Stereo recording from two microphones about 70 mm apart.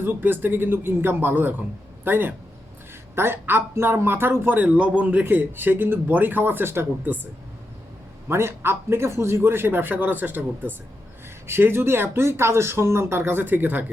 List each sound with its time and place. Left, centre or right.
0.0 s speech: right
8.3 s speech: right